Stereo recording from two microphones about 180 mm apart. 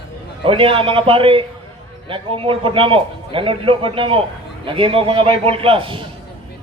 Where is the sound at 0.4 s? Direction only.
30° right (ahead or behind).